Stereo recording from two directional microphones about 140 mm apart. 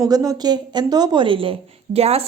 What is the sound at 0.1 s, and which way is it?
A woman's voice, 25° right (ahead or behind).